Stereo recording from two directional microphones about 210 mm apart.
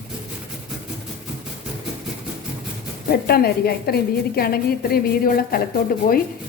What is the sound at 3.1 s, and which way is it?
A woman's voice, 45° left (ahead or behind).